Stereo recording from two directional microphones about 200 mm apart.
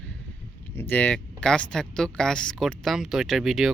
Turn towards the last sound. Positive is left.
turn(degrees=0)  # may be behind; listen again after turning